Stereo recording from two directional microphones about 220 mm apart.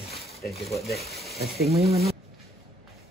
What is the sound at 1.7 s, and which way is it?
Speech, 30° right (ahead or behind).